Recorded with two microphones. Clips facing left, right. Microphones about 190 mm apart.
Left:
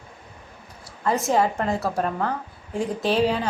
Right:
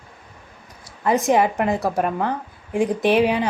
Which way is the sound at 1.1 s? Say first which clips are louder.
Right 3 dB; 15° right (ahead or behind).